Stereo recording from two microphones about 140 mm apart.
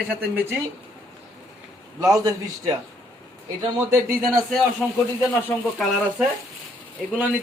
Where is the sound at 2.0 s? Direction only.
25° right (ahead or behind).